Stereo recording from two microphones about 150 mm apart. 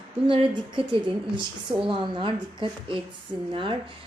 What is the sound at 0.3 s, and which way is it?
Speech, 35° right (ahead or behind).